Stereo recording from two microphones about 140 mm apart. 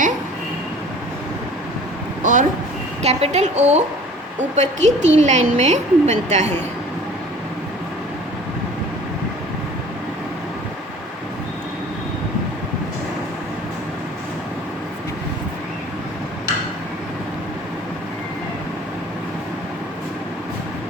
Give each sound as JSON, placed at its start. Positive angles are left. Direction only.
{"t": 2.2, "sound": "speech", "side_deg": -70}
{"t": 3.0, "sound": "a woman's voice", "side_deg": -50}